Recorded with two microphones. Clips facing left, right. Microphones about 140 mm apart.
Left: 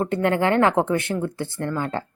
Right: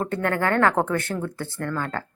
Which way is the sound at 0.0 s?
20° left (ahead or behind).